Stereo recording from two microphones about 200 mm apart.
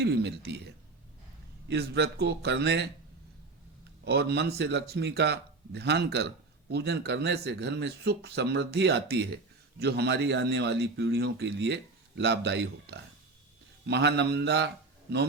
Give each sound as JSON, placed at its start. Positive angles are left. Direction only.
{"t": 0.0, "sound": "a man's voice", "side_deg": -55}
{"t": 4.0, "sound": "a man's voice", "side_deg": -55}